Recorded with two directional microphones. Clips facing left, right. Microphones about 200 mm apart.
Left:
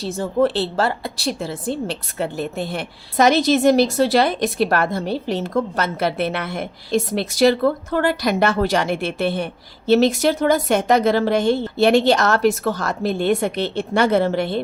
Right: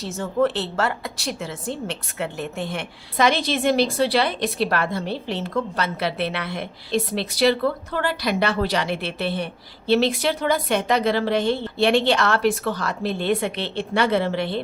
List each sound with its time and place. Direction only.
0.0 s a woman's voice: 35° left (ahead or behind)